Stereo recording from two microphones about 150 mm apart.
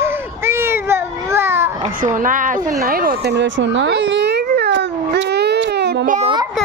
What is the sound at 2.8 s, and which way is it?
Speech, 75° right (ahead or behind).